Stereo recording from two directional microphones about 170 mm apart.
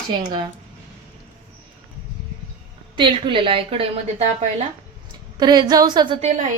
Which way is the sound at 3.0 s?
30° right (ahead or behind).